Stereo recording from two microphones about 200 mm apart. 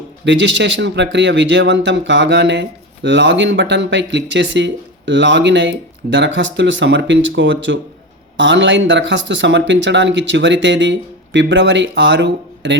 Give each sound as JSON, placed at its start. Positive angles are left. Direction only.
{"t": 0.3, "sound": "speech", "side_deg": -65}